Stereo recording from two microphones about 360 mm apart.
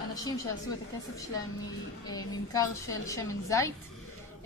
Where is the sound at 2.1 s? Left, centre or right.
Centre.